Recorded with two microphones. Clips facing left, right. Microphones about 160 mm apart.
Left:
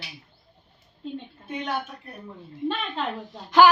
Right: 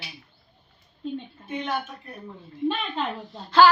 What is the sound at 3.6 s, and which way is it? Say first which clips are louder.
Speech: even; 15° left (ahead or behind).